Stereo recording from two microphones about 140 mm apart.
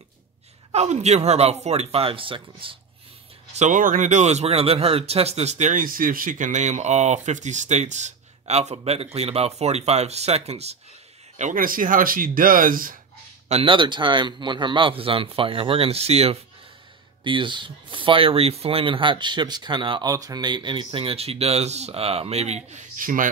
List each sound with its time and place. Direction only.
0.7 s speech: 50° right (ahead or behind)
3.5 s speech: 65° right (ahead or behind)
11.3 s speech: 65° right (ahead or behind)
13.5 s a man's voice: 40° right (ahead or behind)
17.2 s a man's voice: 35° right (ahead or behind); by 22.8 s 50° right (ahead or behind)
22.9 s speech: 75° right (ahead or behind)